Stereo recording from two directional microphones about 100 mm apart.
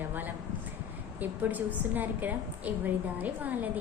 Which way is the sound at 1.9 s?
15° right (ahead or behind).